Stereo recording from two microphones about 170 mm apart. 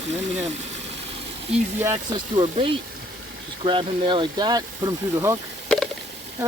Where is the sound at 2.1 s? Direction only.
30° right (ahead or behind).